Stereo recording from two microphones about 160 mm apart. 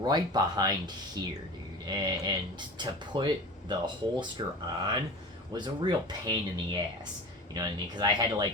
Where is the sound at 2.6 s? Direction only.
30° right (ahead or behind).